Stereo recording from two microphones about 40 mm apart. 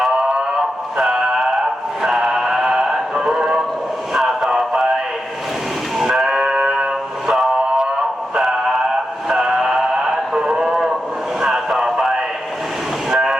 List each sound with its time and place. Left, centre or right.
0.9 s music: centre
4.1 s a sound: centre
4.4 s music: centre
6.0 s a sound: centre
6.4 s music: right
9.3 s music: centre
13.1 s train: centre